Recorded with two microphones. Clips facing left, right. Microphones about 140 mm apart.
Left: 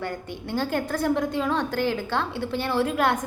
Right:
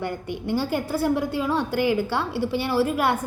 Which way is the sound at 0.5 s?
10° right (ahead or behind).